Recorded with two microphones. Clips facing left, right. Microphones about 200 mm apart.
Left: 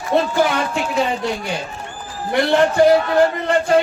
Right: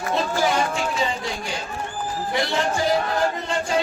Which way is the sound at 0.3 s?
60° left (ahead or behind).